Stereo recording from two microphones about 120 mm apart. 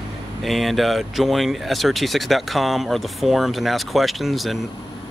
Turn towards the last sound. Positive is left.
turn(degrees=0)  # may be behind; listen again after turning